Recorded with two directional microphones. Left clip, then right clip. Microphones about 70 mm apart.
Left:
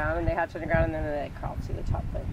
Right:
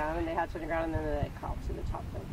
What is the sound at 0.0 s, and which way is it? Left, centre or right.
Speech, left.